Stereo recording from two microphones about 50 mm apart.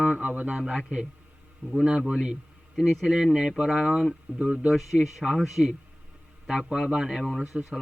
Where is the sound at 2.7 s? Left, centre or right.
Centre.